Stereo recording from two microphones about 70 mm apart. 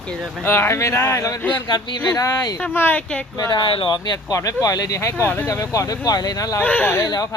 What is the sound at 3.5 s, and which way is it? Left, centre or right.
Speech, left.